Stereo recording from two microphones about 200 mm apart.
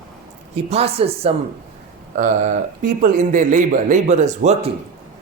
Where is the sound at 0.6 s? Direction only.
30° right (ahead or behind).